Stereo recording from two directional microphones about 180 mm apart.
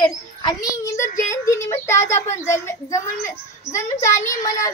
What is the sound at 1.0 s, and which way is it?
Speech, 45° left (ahead or behind).